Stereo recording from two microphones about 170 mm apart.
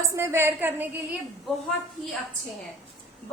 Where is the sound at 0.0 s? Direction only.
15° right (ahead or behind).